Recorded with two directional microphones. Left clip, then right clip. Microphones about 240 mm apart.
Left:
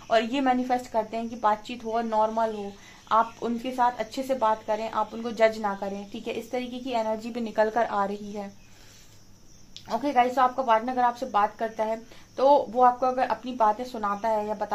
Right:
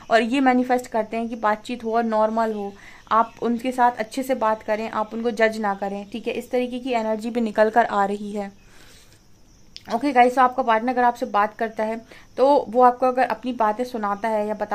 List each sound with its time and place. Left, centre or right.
0.1 s speech: right
9.8 s speech: right